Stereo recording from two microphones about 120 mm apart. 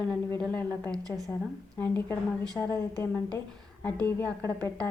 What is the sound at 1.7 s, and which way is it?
Speech, 15° left (ahead or behind).